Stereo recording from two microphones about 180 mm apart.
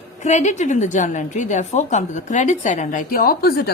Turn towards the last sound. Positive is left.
turn(degrees=60)  # may be behind; listen again after turning